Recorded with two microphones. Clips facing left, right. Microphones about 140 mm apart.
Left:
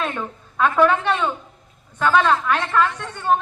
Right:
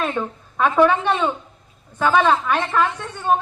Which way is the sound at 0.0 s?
15° right (ahead or behind).